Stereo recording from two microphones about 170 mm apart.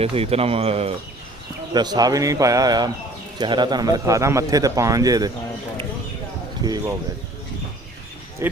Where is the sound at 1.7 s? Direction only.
25° right (ahead or behind).